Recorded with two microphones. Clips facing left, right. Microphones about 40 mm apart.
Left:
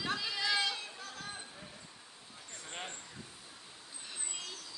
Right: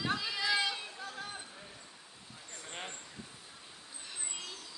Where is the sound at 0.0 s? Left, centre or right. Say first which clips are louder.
Right 1 dB; centre.